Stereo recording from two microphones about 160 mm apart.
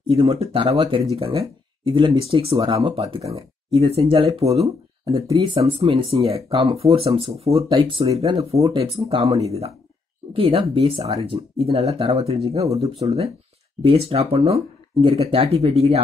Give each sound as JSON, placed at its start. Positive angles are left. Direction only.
{"t": 0.1, "sound": "speech", "side_deg": -40}
{"t": 5.0, "sound": "speech", "side_deg": -25}
{"t": 12.6, "sound": "speech", "side_deg": -20}
{"t": 13.8, "sound": "speech", "side_deg": -40}